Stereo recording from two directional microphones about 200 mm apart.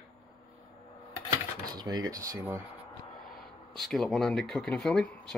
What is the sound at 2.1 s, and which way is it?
Speech, 15° right (ahead or behind).